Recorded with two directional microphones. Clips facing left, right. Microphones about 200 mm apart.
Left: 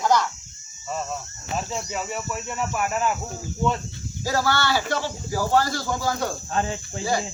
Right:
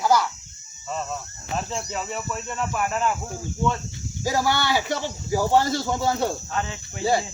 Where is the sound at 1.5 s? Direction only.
5° left (ahead or behind).